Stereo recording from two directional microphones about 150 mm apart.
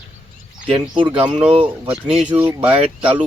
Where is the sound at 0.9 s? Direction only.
35° right (ahead or behind).